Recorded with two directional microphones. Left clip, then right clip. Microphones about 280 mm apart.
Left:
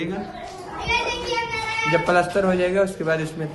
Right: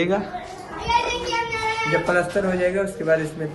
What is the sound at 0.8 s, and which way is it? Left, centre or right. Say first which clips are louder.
Children playing: right 2 dB; centre.